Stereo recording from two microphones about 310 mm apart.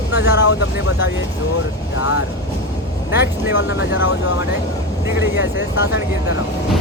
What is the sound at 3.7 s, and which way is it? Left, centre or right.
Speech, left.